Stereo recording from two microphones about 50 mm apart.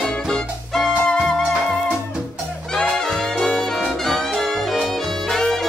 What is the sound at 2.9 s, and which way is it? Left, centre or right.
Brass instrument, centre.